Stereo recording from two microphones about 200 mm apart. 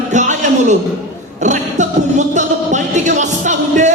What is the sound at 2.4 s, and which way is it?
Music, 35° right (ahead or behind).